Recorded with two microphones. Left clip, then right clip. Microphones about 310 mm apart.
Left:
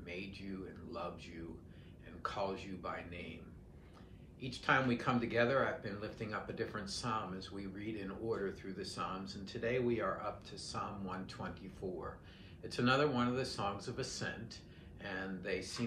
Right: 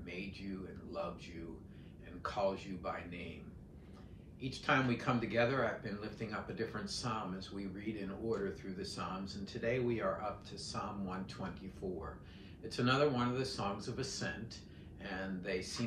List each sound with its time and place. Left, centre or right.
0.0 s a sound: centre
0.9 s speech: centre
4.4 s speech: centre
12.6 s speech: centre